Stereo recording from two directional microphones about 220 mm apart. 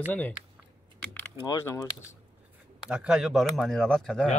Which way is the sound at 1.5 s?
15° left (ahead or behind).